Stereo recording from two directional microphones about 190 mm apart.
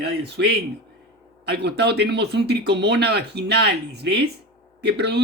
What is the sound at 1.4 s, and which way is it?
Speech, 60° right (ahead or behind).